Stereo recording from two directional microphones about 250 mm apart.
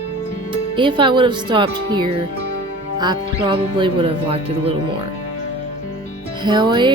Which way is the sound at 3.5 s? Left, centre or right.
Centre.